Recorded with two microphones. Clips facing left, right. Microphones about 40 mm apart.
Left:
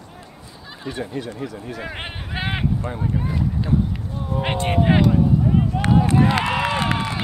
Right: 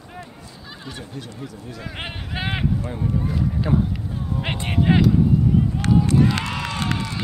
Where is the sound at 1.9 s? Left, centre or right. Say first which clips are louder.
Left 1 dB; centre.